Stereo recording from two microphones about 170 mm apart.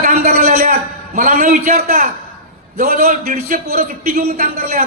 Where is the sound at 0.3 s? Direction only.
65° right (ahead or behind).